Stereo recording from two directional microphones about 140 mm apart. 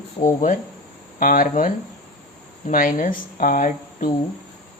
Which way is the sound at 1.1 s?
80° left.